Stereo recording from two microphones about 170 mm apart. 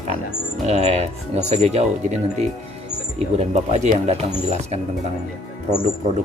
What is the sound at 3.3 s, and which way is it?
Speech, 40° right (ahead or behind).